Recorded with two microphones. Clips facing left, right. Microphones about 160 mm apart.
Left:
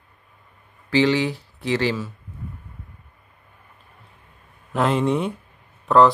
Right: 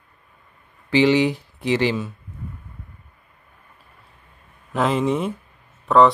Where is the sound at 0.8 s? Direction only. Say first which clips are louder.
Right 2 dB; 15° right (ahead or behind).